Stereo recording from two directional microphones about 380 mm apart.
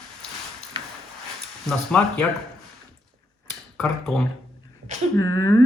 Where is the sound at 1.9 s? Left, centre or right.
Centre.